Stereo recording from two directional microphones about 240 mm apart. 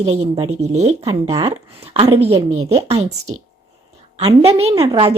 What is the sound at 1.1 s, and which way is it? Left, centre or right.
Speech, centre.